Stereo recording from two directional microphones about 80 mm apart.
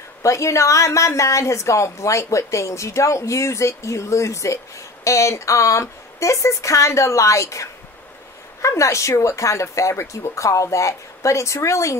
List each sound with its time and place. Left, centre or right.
0.2 s a woman's voice: left
8.6 s a woman's voice: left